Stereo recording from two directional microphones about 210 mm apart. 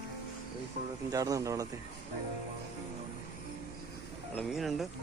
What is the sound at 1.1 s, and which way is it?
Speech, 15° right (ahead or behind).